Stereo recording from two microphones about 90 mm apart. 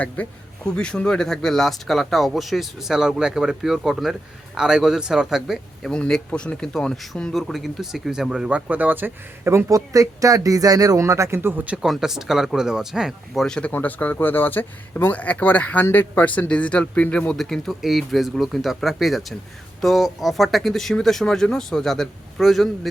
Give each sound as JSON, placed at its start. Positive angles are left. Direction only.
{"t": 0.2, "sound": "speech", "side_deg": 15}
{"t": 5.9, "sound": "speech", "side_deg": 10}
{"t": 11.8, "sound": "speech", "side_deg": -5}